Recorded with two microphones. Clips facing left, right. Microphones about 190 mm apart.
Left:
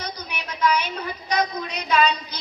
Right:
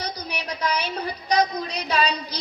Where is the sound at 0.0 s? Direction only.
35° right (ahead or behind).